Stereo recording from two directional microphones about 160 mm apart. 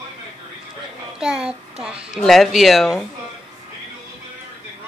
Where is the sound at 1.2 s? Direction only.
5° right (ahead or behind).